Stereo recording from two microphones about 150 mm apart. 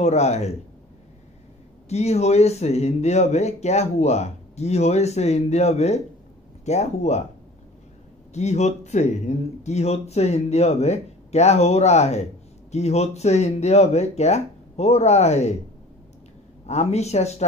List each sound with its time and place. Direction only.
0.0 s speech: 45° left (ahead or behind)
1.9 s speech: 45° left (ahead or behind)
8.3 s speech: 50° left (ahead or behind)
16.6 s speech: 45° left (ahead or behind)